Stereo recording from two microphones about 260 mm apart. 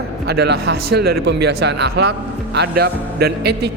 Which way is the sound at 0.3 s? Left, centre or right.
Right.